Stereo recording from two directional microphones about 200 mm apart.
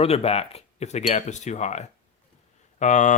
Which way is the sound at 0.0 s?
30° left (ahead or behind).